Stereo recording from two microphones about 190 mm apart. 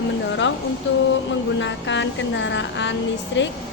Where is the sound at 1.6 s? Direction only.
70° left (ahead or behind).